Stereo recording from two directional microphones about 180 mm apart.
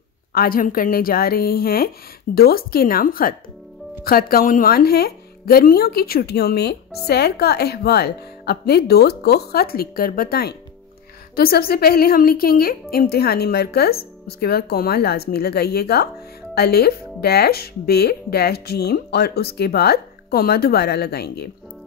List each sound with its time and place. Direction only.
0.3 s speech: 55° left (ahead or behind)